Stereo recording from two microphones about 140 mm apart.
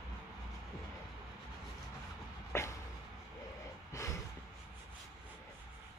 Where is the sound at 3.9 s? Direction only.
20° left (ahead or behind).